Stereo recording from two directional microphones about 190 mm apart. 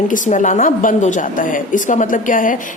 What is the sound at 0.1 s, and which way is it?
A woman's voice, 40° left (ahead or behind).